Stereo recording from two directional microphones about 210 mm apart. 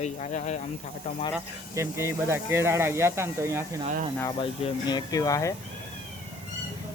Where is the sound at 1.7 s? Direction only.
10° right (ahead or behind).